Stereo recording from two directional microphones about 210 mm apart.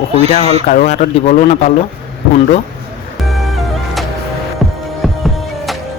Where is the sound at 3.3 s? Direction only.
Centre (ahead or behind).